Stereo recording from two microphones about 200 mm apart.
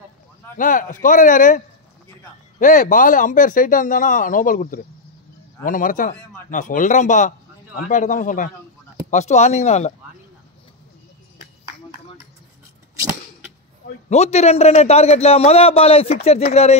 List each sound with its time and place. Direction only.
0.6 s a man's voice: 40° left (ahead or behind)
2.6 s a man's voice: 40° left (ahead or behind)
14.0 s a man's voice: 35° left (ahead or behind)